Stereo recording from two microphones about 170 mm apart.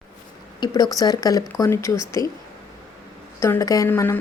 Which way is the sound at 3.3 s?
20° left (ahead or behind).